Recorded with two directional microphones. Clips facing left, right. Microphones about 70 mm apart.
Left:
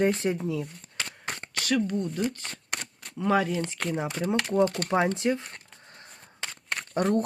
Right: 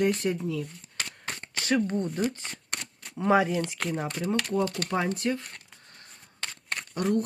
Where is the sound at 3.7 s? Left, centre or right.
Centre.